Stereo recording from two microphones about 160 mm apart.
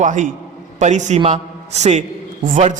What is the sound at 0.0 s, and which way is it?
A man's voice, 50° right (ahead or behind).